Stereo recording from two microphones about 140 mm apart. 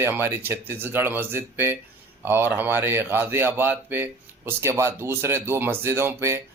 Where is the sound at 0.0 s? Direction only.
15° right (ahead or behind).